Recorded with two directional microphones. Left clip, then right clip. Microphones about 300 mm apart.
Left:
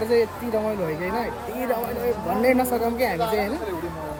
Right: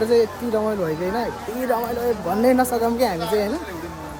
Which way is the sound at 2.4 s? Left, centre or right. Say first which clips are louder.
Right 3 dB; centre.